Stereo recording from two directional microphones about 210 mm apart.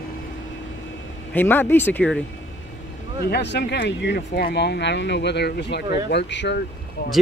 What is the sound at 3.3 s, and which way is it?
Speech, 55° left (ahead or behind).